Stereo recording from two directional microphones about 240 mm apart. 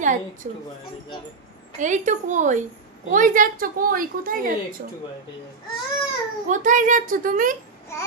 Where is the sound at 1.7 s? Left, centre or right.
Right.